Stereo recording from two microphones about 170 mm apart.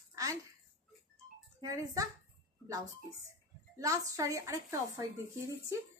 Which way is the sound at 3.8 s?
20° right (ahead or behind).